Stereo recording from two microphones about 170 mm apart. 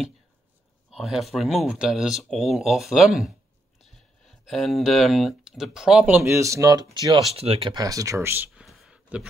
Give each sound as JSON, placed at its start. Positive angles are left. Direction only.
{"t": 0.8, "sound": "speech", "side_deg": 0}
{"t": 7.3, "sound": "speech", "side_deg": -35}
{"t": 8.6, "sound": "a sound", "side_deg": -5}